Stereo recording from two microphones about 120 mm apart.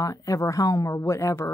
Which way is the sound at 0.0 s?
30° left (ahead or behind).